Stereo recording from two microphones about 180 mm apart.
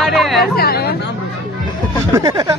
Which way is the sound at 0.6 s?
60° left (ahead or behind).